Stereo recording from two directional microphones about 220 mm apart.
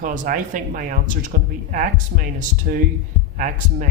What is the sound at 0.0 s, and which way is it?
Speech, 35° right (ahead or behind).